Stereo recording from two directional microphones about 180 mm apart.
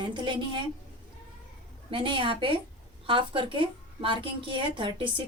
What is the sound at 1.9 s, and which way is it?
A woman's voice, 30° right (ahead or behind).